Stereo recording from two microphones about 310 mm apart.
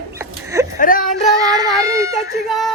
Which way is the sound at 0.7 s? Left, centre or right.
Left.